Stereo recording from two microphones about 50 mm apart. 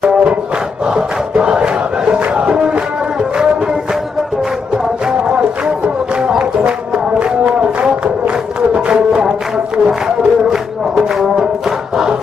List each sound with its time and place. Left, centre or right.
0.0 s music: centre
0.9 s crowd: centre
6.2 s music: centre
7.2 s a sound: right
8.9 s music: centre